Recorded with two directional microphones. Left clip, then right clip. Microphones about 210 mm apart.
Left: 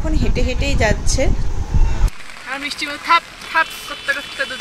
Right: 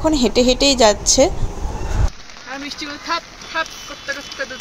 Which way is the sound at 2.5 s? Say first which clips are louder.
Left 4 dB; 25° right (ahead or behind).